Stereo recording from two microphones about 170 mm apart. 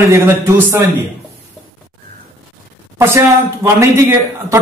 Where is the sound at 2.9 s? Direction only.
15° right (ahead or behind).